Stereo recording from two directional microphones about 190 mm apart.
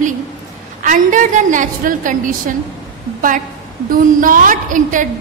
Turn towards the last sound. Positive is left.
turn(degrees=-45)  # may be behind; listen again after turning